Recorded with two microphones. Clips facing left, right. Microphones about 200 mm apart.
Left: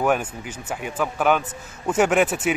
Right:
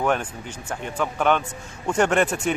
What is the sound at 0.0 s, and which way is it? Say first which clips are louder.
Speech: left 2 dB; 5° left (ahead or behind).